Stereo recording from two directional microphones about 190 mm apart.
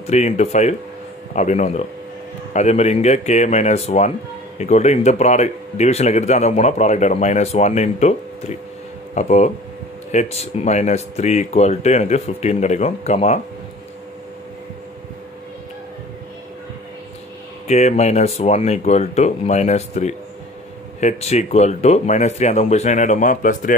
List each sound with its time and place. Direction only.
0.0 s speech: 35° left (ahead or behind)
17.6 s speech: 35° left (ahead or behind)